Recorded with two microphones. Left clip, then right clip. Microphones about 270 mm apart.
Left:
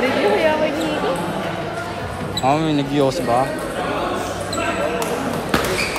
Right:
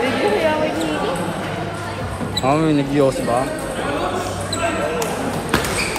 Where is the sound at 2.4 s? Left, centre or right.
Centre.